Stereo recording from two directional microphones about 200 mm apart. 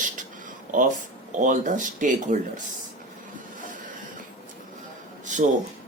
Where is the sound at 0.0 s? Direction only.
40° right (ahead or behind).